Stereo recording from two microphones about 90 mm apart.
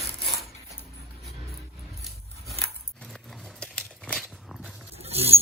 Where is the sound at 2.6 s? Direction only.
5° left (ahead or behind).